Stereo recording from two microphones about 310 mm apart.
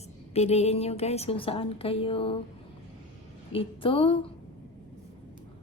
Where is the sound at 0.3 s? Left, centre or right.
Centre.